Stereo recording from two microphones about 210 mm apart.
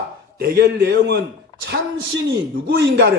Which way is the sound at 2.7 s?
55° right (ahead or behind).